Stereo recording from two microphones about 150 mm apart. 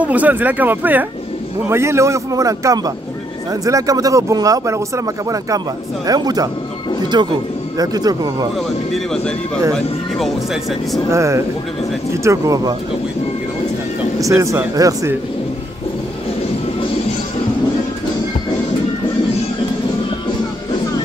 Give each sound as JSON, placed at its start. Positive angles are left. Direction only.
{"t": 0.0, "sound": "speech", "side_deg": -10}
{"t": 8.9, "sound": "speech", "side_deg": 5}
{"t": 11.1, "sound": "speech", "side_deg": -20}
{"t": 14.2, "sound": "speech", "side_deg": -20}